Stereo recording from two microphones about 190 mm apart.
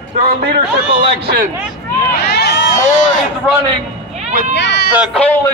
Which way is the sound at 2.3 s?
60° left (ahead or behind).